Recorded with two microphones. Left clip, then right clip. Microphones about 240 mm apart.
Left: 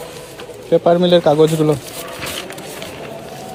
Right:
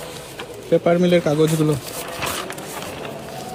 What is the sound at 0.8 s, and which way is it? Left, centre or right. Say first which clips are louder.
Speech: left 6 dB; centre.